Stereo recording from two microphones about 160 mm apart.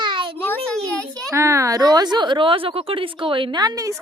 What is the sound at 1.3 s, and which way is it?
A woman's voice, 20° right (ahead or behind).